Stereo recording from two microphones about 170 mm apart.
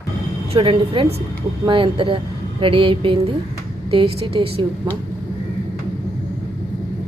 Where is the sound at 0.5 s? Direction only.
30° right (ahead or behind).